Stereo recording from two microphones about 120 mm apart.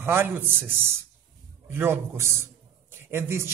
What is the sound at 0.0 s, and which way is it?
A man's voice, 20° right (ahead or behind).